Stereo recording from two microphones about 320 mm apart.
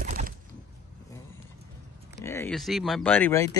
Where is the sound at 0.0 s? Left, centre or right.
Right.